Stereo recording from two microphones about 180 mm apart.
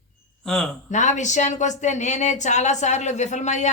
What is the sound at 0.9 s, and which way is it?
A woman's voice, 40° left (ahead or behind).